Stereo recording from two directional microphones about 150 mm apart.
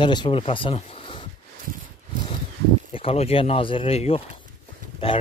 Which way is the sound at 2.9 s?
40° left (ahead or behind).